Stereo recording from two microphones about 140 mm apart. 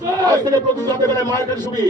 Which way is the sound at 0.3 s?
30° right (ahead or behind).